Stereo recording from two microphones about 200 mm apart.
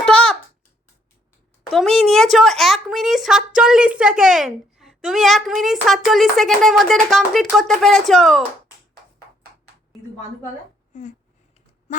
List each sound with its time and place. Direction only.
0.0 s babbling: 5° left (ahead or behind)
1.7 s speech: centre (ahead or behind)
10.9 s a sound: 40° left (ahead or behind)
11.9 s quack: 40° left (ahead or behind)